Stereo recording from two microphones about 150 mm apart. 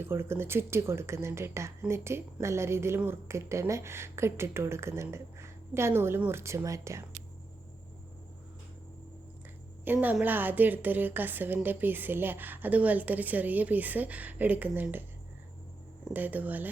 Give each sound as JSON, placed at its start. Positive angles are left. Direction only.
{"t": 0.0, "sound": "a woman's voice", "side_deg": -15}
{"t": 9.8, "sound": "a woman's voice", "side_deg": -10}
{"t": 16.1, "sound": "a woman's voice", "side_deg": -10}